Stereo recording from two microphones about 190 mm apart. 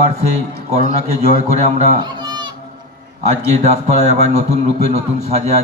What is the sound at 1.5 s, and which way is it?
Speech, 35° right (ahead or behind).